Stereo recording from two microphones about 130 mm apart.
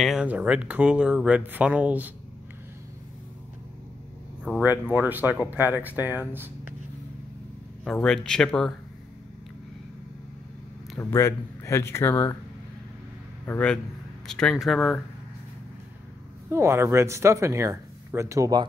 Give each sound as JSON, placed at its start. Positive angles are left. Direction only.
{"t": 0.0, "sound": "speech", "side_deg": -5}
{"t": 4.6, "sound": "speech", "side_deg": -10}
{"t": 7.8, "sound": "speech", "side_deg": 5}
{"t": 11.0, "sound": "speech", "side_deg": 20}
{"t": 13.5, "sound": "speech", "side_deg": 10}
{"t": 16.4, "sound": "speech", "side_deg": -20}